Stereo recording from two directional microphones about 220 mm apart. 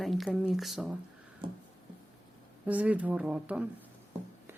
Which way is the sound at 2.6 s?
5° right (ahead or behind).